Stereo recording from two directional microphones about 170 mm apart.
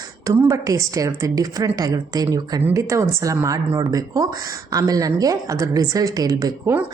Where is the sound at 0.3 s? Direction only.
20° right (ahead or behind).